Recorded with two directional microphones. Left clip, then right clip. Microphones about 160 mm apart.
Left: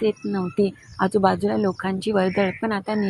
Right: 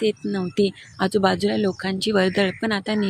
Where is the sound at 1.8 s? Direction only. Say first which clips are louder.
Right 1 dB; 20° right (ahead or behind).